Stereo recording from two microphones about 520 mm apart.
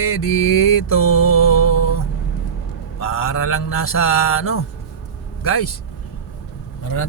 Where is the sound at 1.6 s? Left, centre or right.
Left.